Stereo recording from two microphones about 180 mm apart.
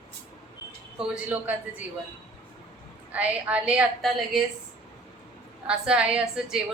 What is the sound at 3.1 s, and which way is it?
A woman's voice, 5° right (ahead or behind).